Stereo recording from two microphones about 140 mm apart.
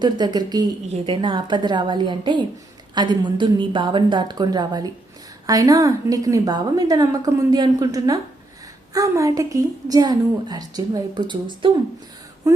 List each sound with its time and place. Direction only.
0.0 s a woman's voice: 30° right (ahead or behind)